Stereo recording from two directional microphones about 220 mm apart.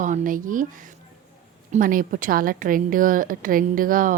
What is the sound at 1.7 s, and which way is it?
A woman's voice, 40° right (ahead or behind).